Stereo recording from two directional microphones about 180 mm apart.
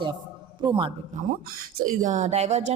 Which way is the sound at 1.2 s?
45° right (ahead or behind).